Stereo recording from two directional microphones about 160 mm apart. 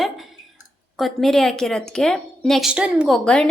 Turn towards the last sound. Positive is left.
turn(degrees=5)  # may be behind; listen again after turning